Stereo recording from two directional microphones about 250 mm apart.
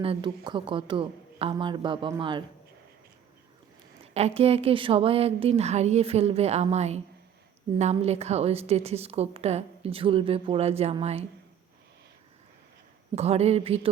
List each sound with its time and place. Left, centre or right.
0.0 s a woman's voice: centre
4.1 s a woman's voice: right
13.1 s a woman's voice: right